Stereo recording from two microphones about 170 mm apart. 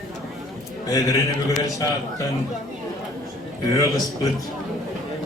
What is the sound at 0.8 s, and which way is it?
Speech, 20° left (ahead or behind).